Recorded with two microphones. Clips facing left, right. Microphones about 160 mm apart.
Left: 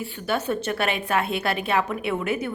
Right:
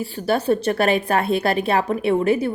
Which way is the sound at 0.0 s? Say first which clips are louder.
Right 5 dB; 35° right (ahead or behind).